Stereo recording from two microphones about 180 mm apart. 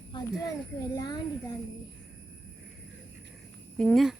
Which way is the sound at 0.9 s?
20° left (ahead or behind).